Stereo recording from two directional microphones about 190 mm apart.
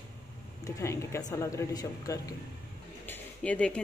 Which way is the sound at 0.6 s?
15° left (ahead or behind).